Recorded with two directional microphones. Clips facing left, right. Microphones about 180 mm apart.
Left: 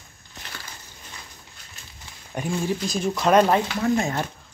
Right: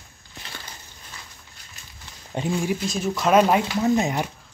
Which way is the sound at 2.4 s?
25° right (ahead or behind).